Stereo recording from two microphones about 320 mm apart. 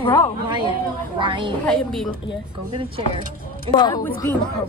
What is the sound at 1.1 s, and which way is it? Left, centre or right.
Speech, centre.